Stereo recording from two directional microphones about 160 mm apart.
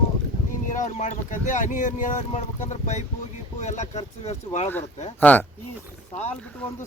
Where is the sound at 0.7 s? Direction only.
50° left (ahead or behind).